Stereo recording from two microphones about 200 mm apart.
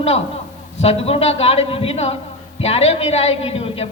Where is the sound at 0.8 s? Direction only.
30° left (ahead or behind).